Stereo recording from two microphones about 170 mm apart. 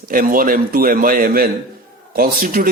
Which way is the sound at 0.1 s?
55° right (ahead or behind).